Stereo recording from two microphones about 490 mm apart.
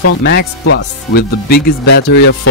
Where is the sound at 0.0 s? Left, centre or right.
Centre.